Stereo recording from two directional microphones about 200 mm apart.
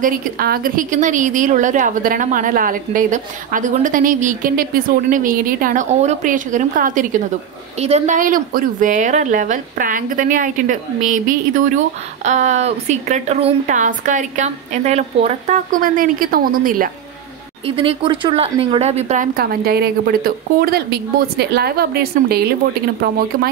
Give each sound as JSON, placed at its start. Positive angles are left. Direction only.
{"t": 0.0, "sound": "a woman's voice", "side_deg": -45}
{"t": 17.6, "sound": "speech", "side_deg": -25}
{"t": 19.3, "sound": "a woman's voice", "side_deg": -50}